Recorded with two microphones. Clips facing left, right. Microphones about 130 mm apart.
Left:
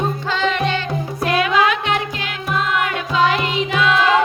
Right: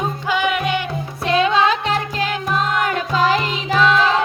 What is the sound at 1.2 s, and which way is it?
Music, 25° right (ahead or behind).